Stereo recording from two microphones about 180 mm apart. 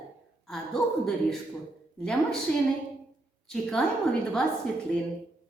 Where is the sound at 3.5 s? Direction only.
5° left (ahead or behind).